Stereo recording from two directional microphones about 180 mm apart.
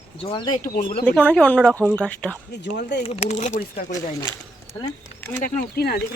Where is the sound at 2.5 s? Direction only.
70° left (ahead or behind).